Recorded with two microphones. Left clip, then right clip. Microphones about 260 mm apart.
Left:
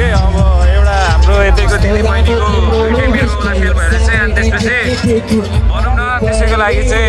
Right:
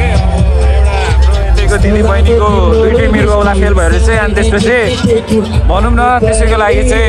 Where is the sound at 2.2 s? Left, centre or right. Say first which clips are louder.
Right 4 dB; centre.